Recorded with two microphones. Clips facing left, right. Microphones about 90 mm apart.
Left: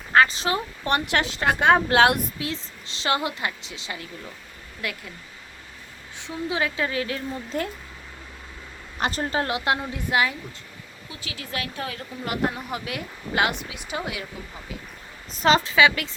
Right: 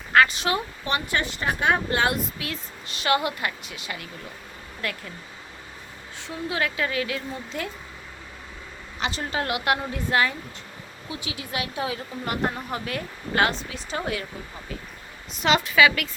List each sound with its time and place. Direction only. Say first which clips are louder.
0.1 s a sound: even; 30° left (ahead or behind)
1.0 s a woman's voice: left 3 dB; 85° left
2.4 s a woman's voice: left 3 dB; 25° left (ahead or behind)
4.8 s a woman's voice: right 1 dB; 15° left (ahead or behind)
6.1 s a woman's voice: left 1 dB; 20° left (ahead or behind); by 7.7 s 40° left (ahead or behind)
9.0 s a woman's voice: left 3 dB; 45° left (ahead or behind)
9.4 s a woman's voice: right 2 dB; 25° left (ahead or behind)
11.1 s speech: right 2 dB; 20° right (ahead or behind)
12.2 s a woman's voice: left 2 dB; 5° left (ahead or behind)
15.3 s a woman's voice: left 3 dB; 35° left (ahead or behind)